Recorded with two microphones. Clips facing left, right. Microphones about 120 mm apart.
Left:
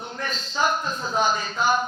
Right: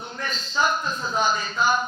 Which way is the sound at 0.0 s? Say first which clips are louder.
Left 1 dB; 55° left (ahead or behind).